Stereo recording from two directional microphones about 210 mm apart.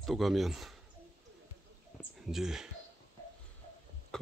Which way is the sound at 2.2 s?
Centre (ahead or behind).